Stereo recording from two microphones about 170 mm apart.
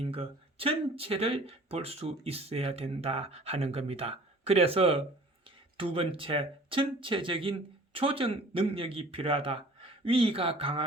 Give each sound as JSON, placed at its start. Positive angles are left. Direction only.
{"t": 0.1, "sound": "speech", "side_deg": -35}